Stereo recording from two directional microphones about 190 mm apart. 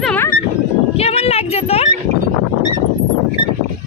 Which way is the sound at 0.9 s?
30° left (ahead or behind).